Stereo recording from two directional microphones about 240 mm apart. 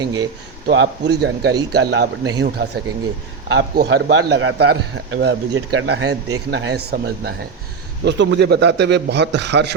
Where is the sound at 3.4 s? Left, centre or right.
Right.